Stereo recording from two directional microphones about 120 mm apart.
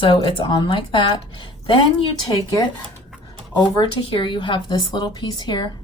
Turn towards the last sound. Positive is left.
turn(degrees=35)  # may be behind; listen again after turning